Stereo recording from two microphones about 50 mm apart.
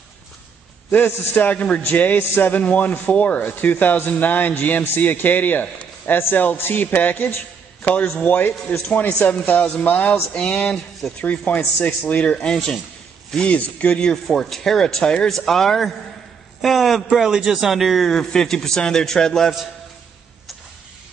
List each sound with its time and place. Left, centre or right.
0.9 s a man's voice: left
2.6 s a man's voice: left
10.3 s a man's voice: left
12.2 s a man's voice: centre
14.2 s a man's voice: centre
17.1 s a man's voice: centre